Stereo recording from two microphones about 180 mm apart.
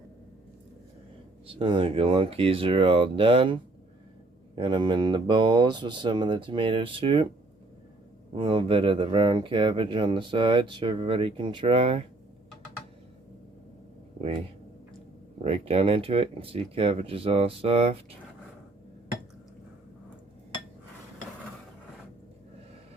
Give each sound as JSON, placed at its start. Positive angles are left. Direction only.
{"t": 1.5, "sound": "speech", "side_deg": -25}
{"t": 8.4, "sound": "speech", "side_deg": -30}
{"t": 15.4, "sound": "speech", "side_deg": -35}